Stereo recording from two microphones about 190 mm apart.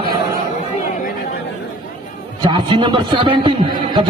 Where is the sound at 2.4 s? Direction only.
25° right (ahead or behind).